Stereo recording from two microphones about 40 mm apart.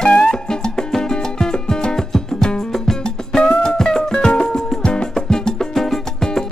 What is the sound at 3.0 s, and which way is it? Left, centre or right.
Music, left.